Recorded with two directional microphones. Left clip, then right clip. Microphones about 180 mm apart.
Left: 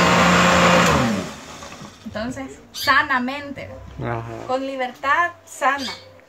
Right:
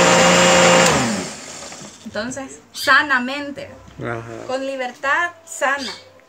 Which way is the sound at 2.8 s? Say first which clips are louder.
Right 3 dB; 5° right (ahead or behind).